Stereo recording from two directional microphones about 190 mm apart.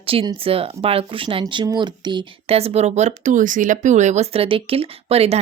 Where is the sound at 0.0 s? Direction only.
30° right (ahead or behind).